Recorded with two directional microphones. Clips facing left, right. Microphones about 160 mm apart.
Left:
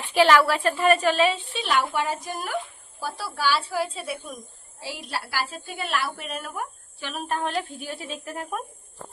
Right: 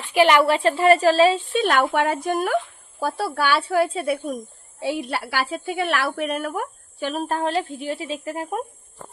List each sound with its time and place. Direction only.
0.1 s a woman's voice: 15° right (ahead or behind); by 7.4 s 35° right (ahead or behind)
7.9 s speech: 25° right (ahead or behind)